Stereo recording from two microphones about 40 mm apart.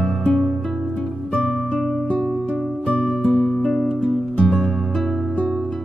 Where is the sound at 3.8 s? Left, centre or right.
Left.